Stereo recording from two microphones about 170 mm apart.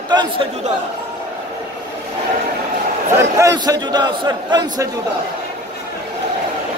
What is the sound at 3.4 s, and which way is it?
A man's voice, 20° right (ahead or behind).